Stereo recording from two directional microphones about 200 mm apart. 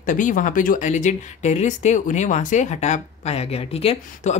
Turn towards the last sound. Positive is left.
turn(degrees=30)  # may be behind; listen again after turning